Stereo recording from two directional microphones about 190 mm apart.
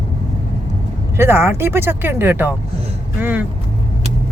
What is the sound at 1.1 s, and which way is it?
Speech, 10° right (ahead or behind).